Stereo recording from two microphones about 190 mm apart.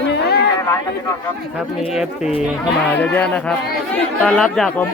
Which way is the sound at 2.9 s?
10° left (ahead or behind).